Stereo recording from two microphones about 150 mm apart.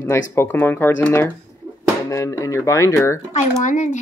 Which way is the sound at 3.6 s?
55° left (ahead or behind).